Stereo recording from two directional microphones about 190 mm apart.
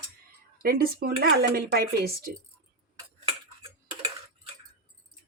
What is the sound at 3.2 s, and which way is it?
Tick-tock, 30° right (ahead or behind).